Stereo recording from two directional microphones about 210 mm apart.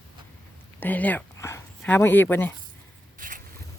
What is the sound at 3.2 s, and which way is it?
Zipper, 40° right (ahead or behind).